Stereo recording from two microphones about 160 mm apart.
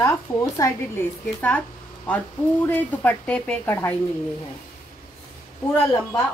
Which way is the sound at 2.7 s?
10° left (ahead or behind).